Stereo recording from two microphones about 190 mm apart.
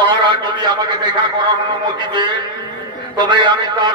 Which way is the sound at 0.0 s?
25° right (ahead or behind).